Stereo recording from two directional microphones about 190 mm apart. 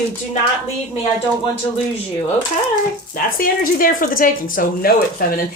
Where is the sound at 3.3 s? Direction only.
50° left (ahead or behind).